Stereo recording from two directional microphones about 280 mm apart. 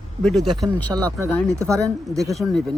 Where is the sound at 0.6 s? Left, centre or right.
Centre.